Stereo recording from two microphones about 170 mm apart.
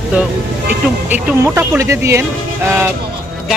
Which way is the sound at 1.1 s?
15° right (ahead or behind).